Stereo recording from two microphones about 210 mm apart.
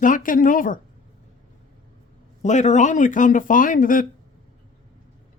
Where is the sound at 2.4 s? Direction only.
35° left (ahead or behind).